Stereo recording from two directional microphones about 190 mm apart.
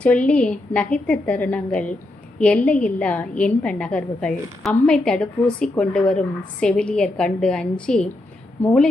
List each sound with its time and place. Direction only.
0.0 s a woman's voice: 5° left (ahead or behind)